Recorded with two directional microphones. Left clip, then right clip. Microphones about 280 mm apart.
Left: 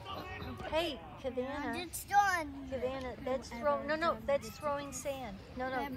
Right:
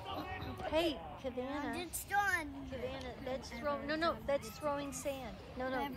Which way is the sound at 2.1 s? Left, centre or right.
Centre.